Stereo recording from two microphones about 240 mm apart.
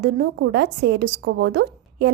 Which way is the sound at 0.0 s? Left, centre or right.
Right.